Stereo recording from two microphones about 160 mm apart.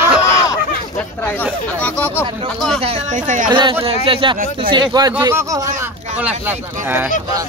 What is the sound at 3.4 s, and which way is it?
A man's voice, 30° right (ahead or behind).